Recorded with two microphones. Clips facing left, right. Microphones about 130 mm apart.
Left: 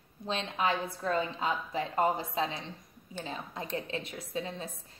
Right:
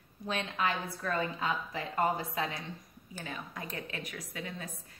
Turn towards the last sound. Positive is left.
turn(degrees=25)  # may be behind; listen again after turning